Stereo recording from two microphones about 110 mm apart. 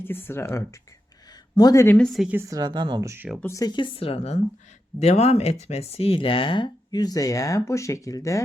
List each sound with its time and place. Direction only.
0.0 s speech: 20° left (ahead or behind)
2.0 s a woman's voice: centre (ahead or behind)
2.3 s a woman's voice: 25° right (ahead or behind)
2.6 s speech: 40° right (ahead or behind)
3.0 s a woman's voice: 25° right (ahead or behind)
3.4 s speech: 30° left (ahead or behind)
3.7 s speech: 45° left (ahead or behind); by 4.4 s 65° left (ahead or behind)
4.9 s speech: 80° left; by 8.4 s 30° left (ahead or behind)